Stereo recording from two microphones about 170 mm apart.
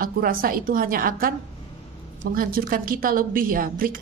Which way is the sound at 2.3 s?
55° right (ahead or behind).